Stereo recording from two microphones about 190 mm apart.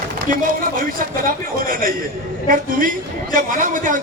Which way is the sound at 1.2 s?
45° right (ahead or behind).